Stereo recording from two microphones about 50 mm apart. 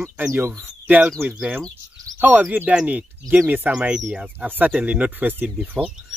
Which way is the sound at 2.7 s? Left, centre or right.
Right.